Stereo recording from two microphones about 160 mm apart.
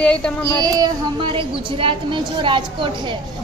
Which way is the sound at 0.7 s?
30° right (ahead or behind).